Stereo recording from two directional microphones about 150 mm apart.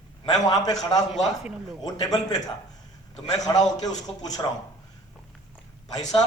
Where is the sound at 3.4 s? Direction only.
25° left (ahead or behind).